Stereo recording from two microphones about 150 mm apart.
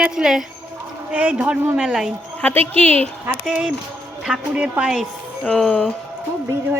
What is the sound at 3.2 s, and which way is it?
Speech, 10° right (ahead or behind).